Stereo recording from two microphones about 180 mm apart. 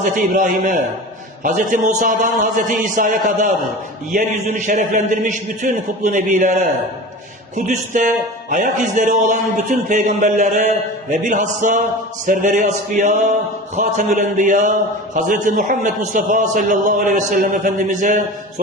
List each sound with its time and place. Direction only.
0.0 s a man's voice: 50° right (ahead or behind)